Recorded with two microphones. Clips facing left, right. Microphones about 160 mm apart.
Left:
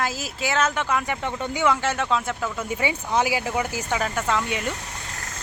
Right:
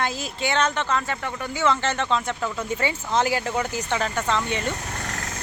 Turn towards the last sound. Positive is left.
turn(degrees=5)  # may be behind; listen again after turning